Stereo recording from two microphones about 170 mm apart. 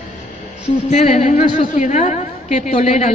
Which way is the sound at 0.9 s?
40° left (ahead or behind).